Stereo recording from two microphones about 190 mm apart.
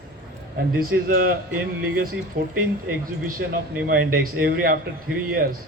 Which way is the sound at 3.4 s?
65° right (ahead or behind).